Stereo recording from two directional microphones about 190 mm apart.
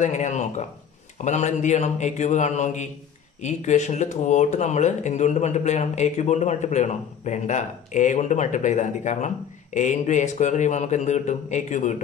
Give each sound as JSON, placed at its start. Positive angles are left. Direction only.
{"t": 0.0, "sound": "speech", "side_deg": 40}